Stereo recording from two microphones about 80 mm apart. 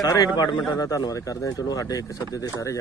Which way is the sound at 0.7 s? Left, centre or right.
Left.